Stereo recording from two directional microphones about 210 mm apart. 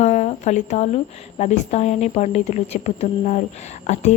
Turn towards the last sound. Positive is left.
turn(degrees=35)  # may be behind; listen again after turning